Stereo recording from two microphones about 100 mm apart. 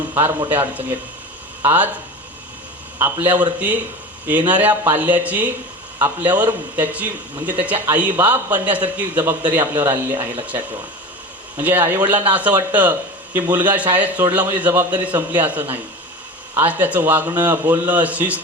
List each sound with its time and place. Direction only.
0.1 s speech: 20° right (ahead or behind)
3.0 s speech: 20° right (ahead or behind)
11.5 s speech: 20° right (ahead or behind)